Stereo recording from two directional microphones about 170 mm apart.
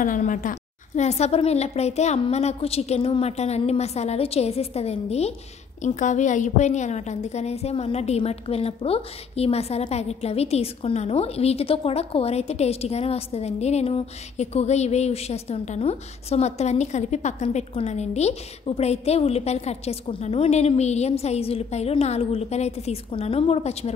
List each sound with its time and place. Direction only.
0.0 s a woman's voice: 50° left (ahead or behind)